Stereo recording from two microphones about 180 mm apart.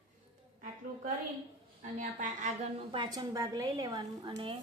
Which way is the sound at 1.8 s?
45° right (ahead or behind).